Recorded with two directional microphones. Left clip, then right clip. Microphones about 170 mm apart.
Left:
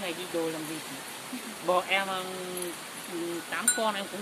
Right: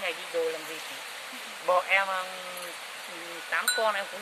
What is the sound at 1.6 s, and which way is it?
Speech, 25° right (ahead or behind).